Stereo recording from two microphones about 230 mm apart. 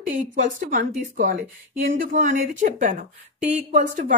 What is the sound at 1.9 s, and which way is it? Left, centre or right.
A woman's voice, right.